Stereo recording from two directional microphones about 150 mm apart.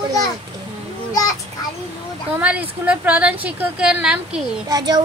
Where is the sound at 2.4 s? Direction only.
10° right (ahead or behind).